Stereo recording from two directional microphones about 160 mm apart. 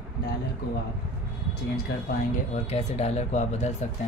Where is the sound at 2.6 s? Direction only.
40° left (ahead or behind).